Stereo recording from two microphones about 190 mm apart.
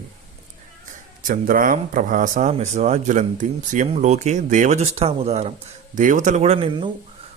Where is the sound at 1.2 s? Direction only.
45° right (ahead or behind).